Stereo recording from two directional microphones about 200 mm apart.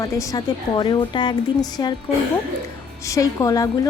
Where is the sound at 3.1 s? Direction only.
15° left (ahead or behind).